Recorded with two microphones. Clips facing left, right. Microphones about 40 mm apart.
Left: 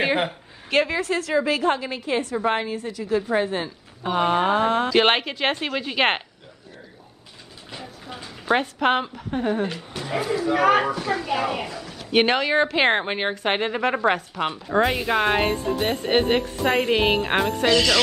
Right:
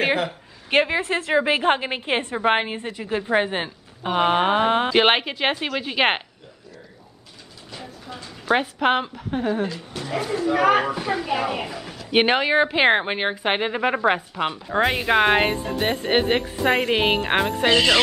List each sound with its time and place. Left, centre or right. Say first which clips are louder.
0.7 s a woman's voice: right 1 dB; right
4.9 s speech: right 1 dB; centre
7.7 s a sound: even; centre
8.5 s a woman's voice: right 1 dB; centre
9.8 s speech: even; centre
10.4 s a woman's voice: right 1 dB; centre
10.9 s speech: even; centre
15.0 s speech: right 3 dB; right
17.6 s speech: right 2 dB; right